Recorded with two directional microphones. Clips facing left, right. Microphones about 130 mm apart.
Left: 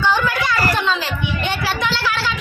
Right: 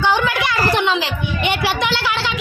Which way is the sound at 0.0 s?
20° right (ahead or behind).